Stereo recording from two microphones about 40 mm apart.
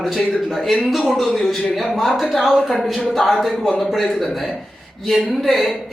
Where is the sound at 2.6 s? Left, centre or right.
Centre.